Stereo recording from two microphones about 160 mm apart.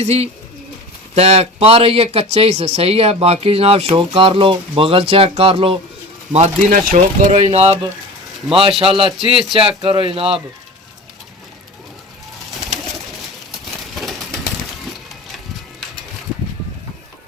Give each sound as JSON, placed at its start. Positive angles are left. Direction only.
{"t": 0.0, "sound": "speech", "side_deg": -45}
{"t": 6.3, "sound": "speech", "side_deg": -50}
{"t": 8.8, "sound": "speech", "side_deg": -35}
{"t": 13.9, "sound": "pigeon", "side_deg": 0}